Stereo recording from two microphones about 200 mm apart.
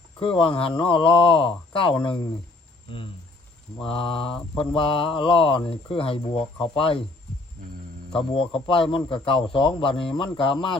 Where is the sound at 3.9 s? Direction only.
25° left (ahead or behind).